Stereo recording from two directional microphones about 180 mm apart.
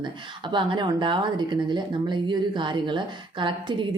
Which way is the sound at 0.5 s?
25° right (ahead or behind).